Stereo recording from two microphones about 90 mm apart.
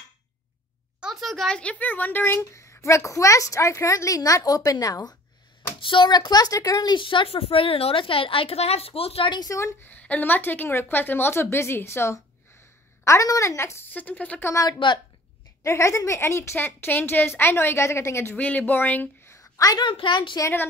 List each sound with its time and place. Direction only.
1.0 s a sound: centre (ahead or behind)
1.6 s a woman's voice: 15° left (ahead or behind)
2.5 s a woman's voice: 35° left (ahead or behind)
5.8 s a woman's voice: 65° left (ahead or behind); by 9.4 s 80° left
9.4 s a woman's voice: 35° left (ahead or behind)
9.8 s a woman's voice: 15° left (ahead or behind)
14.5 s a woman's voice: 40° left (ahead or behind); by 19.0 s 20° left (ahead or behind)
19.2 s a sound: 35° left (ahead or behind)
19.8 s a woman's voice: 65° left (ahead or behind)
20.3 s a woman's voice: 30° left (ahead or behind)